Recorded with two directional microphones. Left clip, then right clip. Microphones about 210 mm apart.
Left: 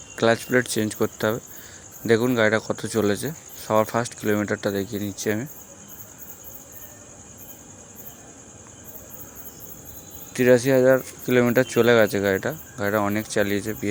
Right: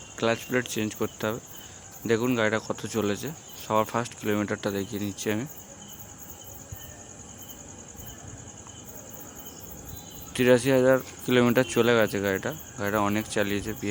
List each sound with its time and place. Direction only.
0.2 s speech: 25° left (ahead or behind)
10.3 s speech: 10° left (ahead or behind)